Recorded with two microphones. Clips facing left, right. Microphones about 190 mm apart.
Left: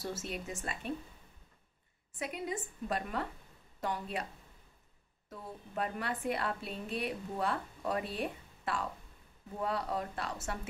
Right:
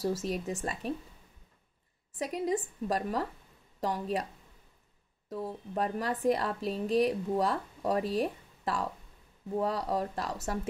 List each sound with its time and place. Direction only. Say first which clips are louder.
0.0 s a woman's voice: right 8 dB; 35° right (ahead or behind)
2.1 s a woman's voice: right 7 dB; 35° right (ahead or behind)
5.3 s a woman's voice: right 7 dB; 35° right (ahead or behind)